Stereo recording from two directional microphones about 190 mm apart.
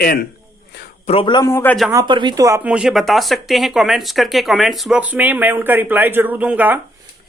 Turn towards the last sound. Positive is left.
turn(degrees=-10)  # may be behind; listen again after turning